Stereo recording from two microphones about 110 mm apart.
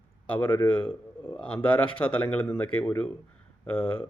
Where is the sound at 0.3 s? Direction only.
20° left (ahead or behind).